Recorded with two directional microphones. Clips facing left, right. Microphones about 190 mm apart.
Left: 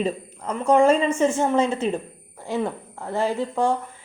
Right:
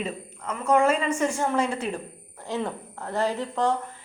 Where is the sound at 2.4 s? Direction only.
15° left (ahead or behind).